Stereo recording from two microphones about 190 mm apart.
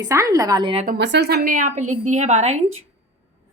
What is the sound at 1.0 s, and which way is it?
A woman's voice, 60° right (ahead or behind).